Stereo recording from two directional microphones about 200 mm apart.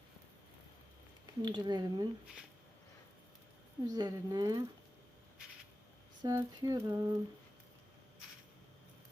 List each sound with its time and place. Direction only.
1.4 s speech: 20° right (ahead or behind)
3.8 s speech: 20° right (ahead or behind)
6.2 s speech: 15° right (ahead or behind)